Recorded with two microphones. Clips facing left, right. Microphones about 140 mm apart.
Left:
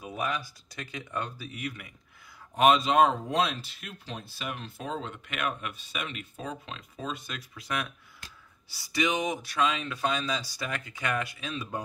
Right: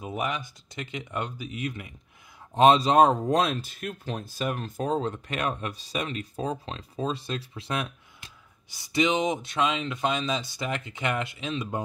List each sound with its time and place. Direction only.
0.0 s speech: 20° right (ahead or behind)